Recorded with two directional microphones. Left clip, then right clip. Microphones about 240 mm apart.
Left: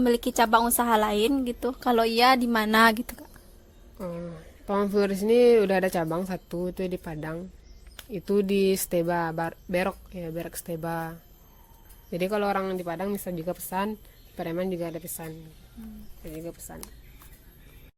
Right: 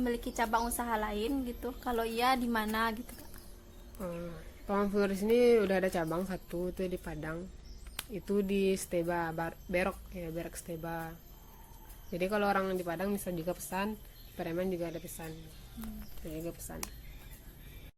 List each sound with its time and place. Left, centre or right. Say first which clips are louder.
0.0 s speech: left 11 dB; left
4.0 s speech: left 5 dB; left
16.4 s speech: left 3 dB; centre